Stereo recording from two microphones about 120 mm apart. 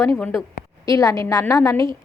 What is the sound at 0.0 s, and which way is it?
A woman's voice, 20° left (ahead or behind).